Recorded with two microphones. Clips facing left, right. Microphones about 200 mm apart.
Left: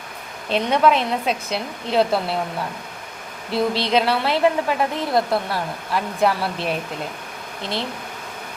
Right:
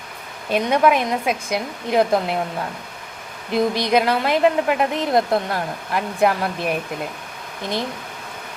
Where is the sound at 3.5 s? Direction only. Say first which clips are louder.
Right 2 dB; 15° right (ahead or behind).